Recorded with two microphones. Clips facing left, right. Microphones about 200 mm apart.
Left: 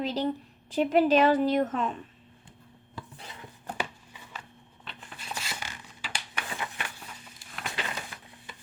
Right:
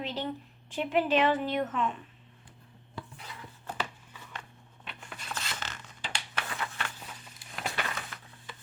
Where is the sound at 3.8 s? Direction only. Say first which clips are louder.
Left 2 dB; 10° left (ahead or behind).